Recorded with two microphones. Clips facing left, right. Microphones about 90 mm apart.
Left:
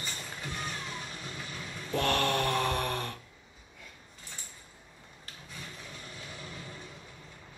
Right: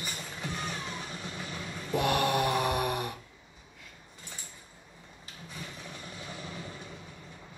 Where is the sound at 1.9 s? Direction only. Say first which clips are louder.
Right 1 dB; 15° right (ahead or behind).